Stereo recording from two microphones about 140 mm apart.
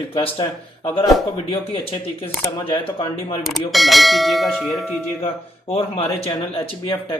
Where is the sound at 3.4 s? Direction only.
Centre (ahead or behind).